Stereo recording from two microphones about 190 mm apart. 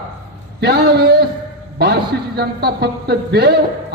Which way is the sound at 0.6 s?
55° right (ahead or behind).